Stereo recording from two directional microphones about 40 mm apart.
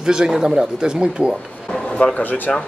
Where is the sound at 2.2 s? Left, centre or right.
Left.